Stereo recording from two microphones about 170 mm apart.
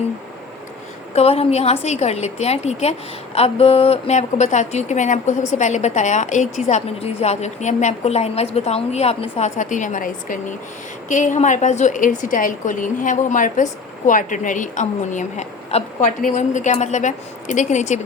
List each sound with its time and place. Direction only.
1.1 s a woman's voice: 35° left (ahead or behind)